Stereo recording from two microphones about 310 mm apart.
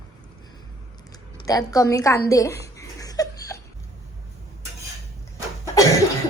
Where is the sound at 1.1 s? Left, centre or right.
Centre.